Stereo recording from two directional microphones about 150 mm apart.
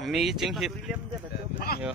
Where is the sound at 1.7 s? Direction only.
90° left.